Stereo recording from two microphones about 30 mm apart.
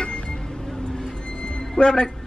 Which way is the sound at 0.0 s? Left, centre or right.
Left.